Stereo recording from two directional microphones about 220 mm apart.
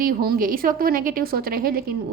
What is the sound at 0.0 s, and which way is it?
A woman's voice, 40° right (ahead or behind).